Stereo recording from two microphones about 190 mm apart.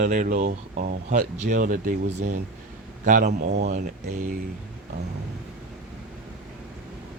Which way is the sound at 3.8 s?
45° right (ahead or behind).